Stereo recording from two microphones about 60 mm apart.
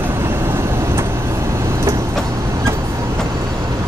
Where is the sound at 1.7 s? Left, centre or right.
Right.